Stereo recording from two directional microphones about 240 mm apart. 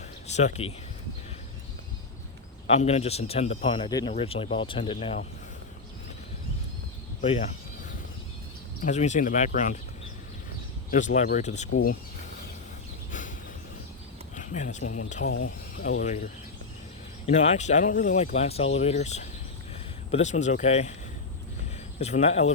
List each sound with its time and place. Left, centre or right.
0.3 s speech: left
2.6 s speech: left
7.2 s speech: left
8.8 s speech: left
10.9 s speech: left
13.1 s a sound: left
14.3 s speech: left
21.9 s speech: left